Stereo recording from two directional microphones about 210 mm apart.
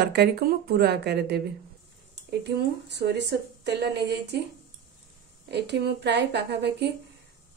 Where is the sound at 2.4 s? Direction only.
55° right (ahead or behind).